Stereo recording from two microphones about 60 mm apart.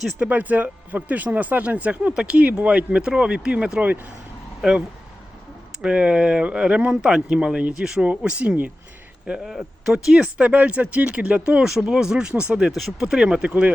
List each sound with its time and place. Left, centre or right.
0.3 s speech: right
4.6 s speech: centre
5.8 s speech: centre
9.4 s speech: centre
12.7 s speech: centre
13.1 s speech: centre